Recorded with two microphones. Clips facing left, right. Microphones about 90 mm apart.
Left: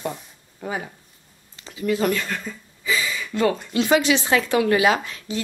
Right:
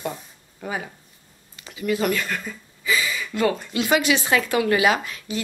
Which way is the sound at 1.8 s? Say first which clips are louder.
Left 1 dB; 25° left (ahead or behind).